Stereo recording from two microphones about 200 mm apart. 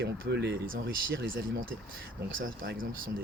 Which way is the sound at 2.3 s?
75° right (ahead or behind).